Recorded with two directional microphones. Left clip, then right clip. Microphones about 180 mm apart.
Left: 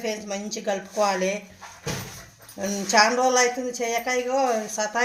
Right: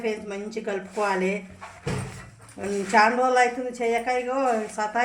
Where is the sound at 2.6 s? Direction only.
45° left (ahead or behind).